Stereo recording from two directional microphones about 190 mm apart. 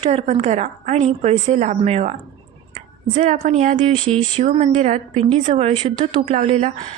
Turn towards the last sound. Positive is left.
turn(degrees=-40)  # may be behind; listen again after turning